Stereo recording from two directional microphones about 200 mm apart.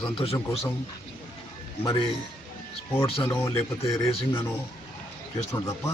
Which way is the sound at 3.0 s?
30° left (ahead or behind).